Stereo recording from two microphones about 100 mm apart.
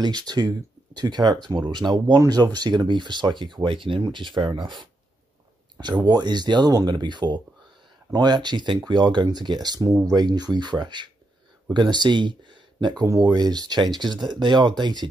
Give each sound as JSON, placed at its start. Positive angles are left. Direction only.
{"t": 0.0, "sound": "speech", "side_deg": -45}
{"t": 5.8, "sound": "speech", "side_deg": -45}